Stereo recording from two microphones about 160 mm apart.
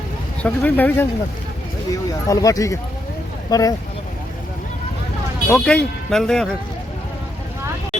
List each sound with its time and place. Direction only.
0.4 s speech: 10° left (ahead or behind)
5.5 s speech: 5° left (ahead or behind)